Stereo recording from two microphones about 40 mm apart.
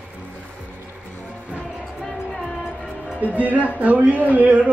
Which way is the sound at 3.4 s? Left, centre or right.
Right.